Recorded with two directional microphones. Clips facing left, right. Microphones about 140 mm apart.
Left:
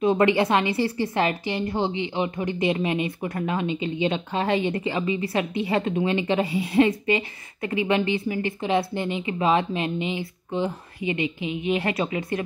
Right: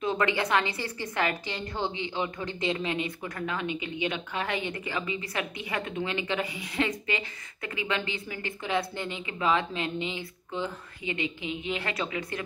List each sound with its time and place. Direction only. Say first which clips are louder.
0.0 s a woman's voice: left 8 dB; 20° left (ahead or behind)